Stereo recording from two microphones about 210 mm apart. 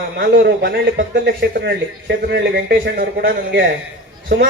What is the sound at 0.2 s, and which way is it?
A man's voice, 50° right (ahead or behind).